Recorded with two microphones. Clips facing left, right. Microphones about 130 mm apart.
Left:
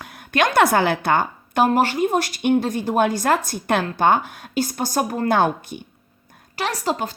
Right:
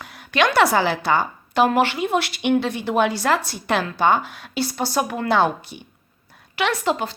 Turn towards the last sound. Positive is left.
turn(degrees=40)  # may be behind; listen again after turning